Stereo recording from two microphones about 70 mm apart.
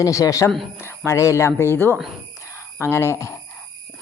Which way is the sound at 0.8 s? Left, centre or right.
Left.